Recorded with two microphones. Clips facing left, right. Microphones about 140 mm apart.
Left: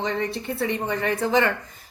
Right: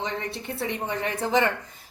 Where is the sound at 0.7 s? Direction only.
15° right (ahead or behind).